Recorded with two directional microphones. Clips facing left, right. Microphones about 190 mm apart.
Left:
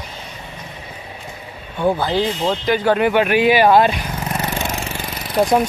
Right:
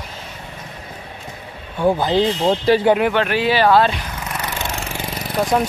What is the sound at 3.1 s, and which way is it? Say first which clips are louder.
Speech: left 3 dB; 15° left (ahead or behind).